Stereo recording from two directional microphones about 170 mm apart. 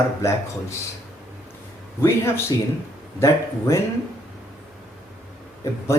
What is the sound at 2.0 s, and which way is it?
A man's voice, 15° left (ahead or behind).